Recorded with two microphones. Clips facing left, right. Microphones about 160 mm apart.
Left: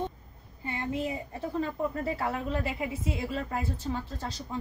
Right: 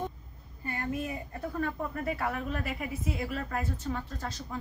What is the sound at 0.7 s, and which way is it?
A woman's voice, 25° left (ahead or behind).